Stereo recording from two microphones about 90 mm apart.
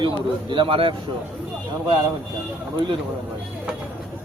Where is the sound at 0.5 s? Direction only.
70° right (ahead or behind).